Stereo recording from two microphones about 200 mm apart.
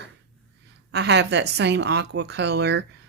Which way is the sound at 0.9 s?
60° right (ahead or behind).